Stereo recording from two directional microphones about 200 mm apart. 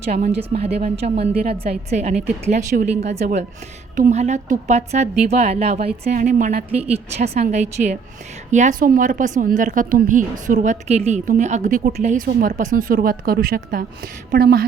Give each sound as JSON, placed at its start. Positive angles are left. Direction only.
{"t": 0.0, "sound": "a woman's voice", "side_deg": -35}
{"t": 6.7, "sound": "a woman's voice", "side_deg": -30}